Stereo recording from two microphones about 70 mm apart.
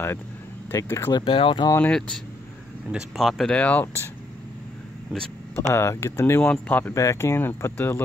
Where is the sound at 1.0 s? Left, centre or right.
Left.